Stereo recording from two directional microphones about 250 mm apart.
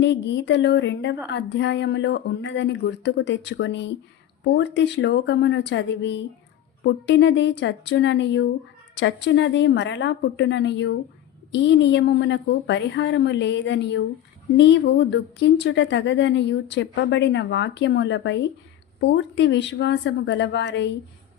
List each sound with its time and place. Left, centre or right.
0.0 s speech: left